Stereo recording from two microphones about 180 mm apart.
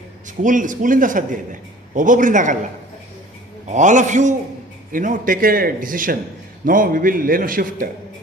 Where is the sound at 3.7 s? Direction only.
45° right (ahead or behind).